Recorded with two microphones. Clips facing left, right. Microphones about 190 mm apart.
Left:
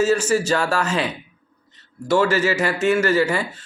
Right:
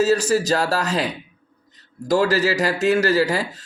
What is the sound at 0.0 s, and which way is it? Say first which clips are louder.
A man's voice: even; 35° right (ahead or behind).